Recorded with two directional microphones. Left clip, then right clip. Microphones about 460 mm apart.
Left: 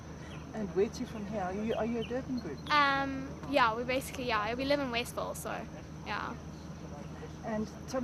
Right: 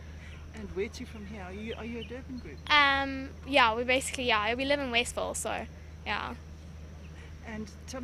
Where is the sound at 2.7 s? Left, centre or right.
Right.